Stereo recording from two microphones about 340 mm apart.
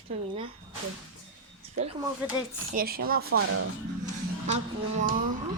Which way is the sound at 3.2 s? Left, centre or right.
Right.